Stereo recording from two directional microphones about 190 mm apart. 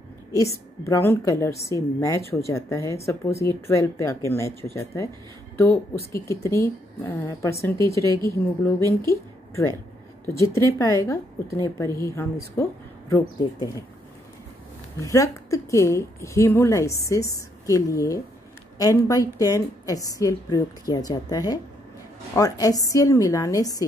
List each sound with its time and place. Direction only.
0.3 s a woman's voice: 15° left (ahead or behind)
6.1 s a woman's voice: 15° left (ahead or behind)
15.0 s a woman's voice: 15° left (ahead or behind)